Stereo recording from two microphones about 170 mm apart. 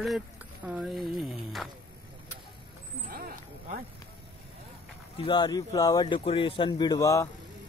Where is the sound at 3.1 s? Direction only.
55° right (ahead or behind).